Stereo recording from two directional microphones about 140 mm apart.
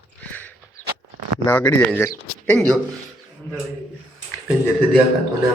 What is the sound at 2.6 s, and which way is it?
Speech, 5° left (ahead or behind).